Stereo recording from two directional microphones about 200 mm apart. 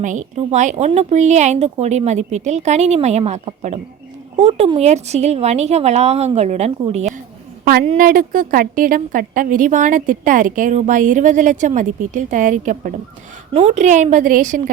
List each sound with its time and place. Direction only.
0.0 s a woman's voice: 40° right (ahead or behind)
7.6 s a woman's voice: 45° right (ahead or behind)